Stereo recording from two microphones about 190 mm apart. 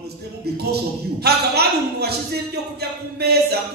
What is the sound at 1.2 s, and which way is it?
Speech, 55° right (ahead or behind).